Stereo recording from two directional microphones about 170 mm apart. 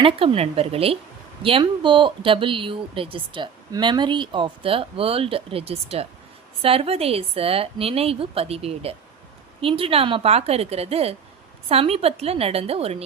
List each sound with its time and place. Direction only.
0.0 s speech: 35° right (ahead or behind)